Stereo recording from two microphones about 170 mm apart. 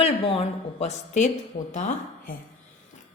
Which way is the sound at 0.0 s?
35° left (ahead or behind).